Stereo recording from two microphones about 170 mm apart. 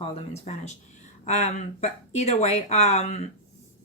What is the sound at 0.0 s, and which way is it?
Speech, 35° left (ahead or behind).